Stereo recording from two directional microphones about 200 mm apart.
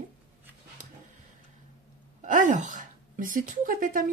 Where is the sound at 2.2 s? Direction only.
40° right (ahead or behind).